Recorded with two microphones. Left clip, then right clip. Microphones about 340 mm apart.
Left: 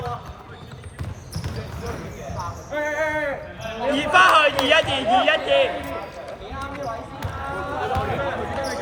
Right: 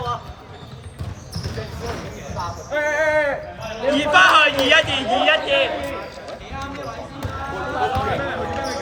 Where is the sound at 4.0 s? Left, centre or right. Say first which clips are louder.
Right 2 dB; centre.